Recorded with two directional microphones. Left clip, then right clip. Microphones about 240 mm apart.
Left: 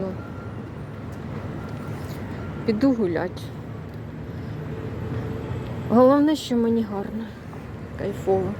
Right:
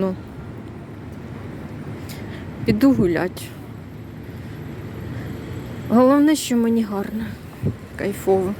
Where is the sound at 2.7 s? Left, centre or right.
Right.